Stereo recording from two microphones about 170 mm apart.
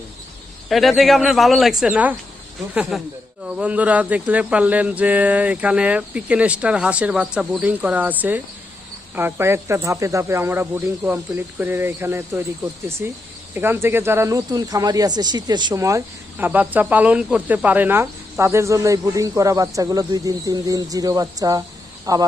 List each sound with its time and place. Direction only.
0.7 s speech: centre (ahead or behind); by 22.2 s 20° right (ahead or behind)